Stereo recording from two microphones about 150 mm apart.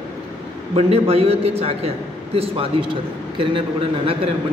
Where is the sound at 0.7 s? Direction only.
40° right (ahead or behind).